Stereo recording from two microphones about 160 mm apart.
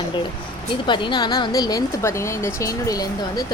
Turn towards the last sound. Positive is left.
turn(degrees=20)  # may be behind; listen again after turning